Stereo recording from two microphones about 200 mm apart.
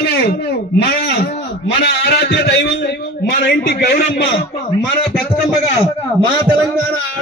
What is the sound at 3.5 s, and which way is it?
Speech, 45° left (ahead or behind).